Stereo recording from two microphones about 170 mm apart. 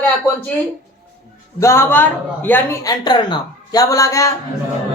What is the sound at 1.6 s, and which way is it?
Speech, 15° left (ahead or behind).